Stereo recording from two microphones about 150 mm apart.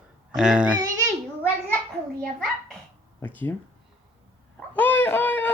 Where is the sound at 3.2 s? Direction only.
10° left (ahead or behind).